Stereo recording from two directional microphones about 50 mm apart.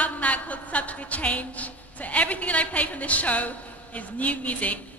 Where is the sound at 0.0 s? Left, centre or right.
Left.